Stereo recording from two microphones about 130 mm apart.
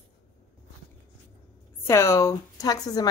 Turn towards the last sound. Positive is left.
turn(degrees=30)  # may be behind; listen again after turning